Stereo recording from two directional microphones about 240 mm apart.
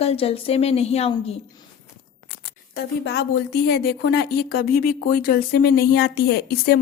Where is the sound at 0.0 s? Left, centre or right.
Left.